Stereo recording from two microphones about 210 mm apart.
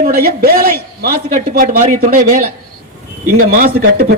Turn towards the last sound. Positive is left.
turn(degrees=-45)  # may be behind; listen again after turning